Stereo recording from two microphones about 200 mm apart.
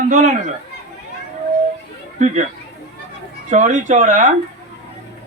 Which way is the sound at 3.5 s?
40° right (ahead or behind).